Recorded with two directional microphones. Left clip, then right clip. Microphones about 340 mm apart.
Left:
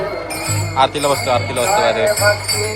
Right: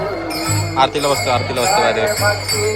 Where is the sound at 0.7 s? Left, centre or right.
Centre.